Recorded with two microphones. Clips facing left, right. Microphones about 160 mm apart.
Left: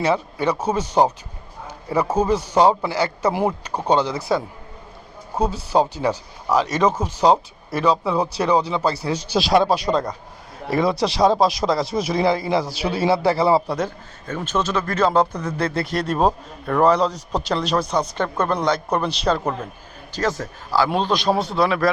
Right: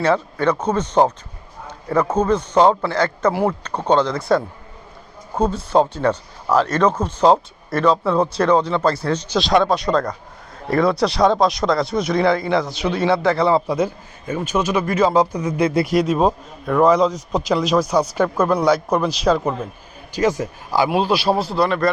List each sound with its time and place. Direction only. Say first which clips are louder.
0.0 s a man's voice: right 2 dB; 5° left (ahead or behind)
3.3 s a man's voice: right 1 dB; 15° left (ahead or behind)
9.9 s speech: right 2 dB; 20° left (ahead or behind)
11.3 s a man's voice: right 1 dB; 5° left (ahead or behind)
13.7 s a man's voice: right 4 dB; 10° right (ahead or behind)
15.8 s speech: right 2 dB; 5° right (ahead or behind)
20.1 s a man's voice: right 5 dB; 15° right (ahead or behind); by 21.9 s centre (ahead or behind)